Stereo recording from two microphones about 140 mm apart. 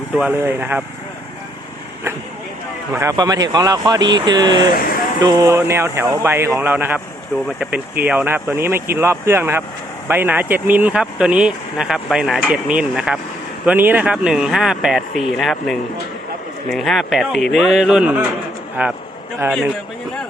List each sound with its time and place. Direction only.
0.2 s speech: 15° right (ahead or behind)
2.9 s speech: 20° right (ahead or behind)
8.0 s a man's voice: 15° right (ahead or behind)